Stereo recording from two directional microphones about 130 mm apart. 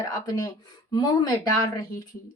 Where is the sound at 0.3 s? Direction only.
30° left (ahead or behind).